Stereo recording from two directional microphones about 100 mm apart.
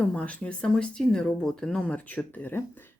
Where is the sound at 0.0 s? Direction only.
15° left (ahead or behind).